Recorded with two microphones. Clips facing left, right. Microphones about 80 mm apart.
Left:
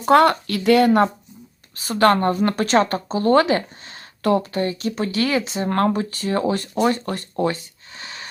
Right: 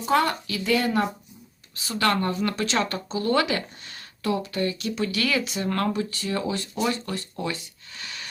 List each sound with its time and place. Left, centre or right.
0.0 s speech: left
1.7 s speech: left
4.2 s speech: left
4.5 s speech: left
7.9 s a sound: left